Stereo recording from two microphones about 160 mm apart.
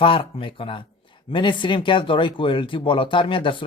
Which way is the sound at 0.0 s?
35° left (ahead or behind).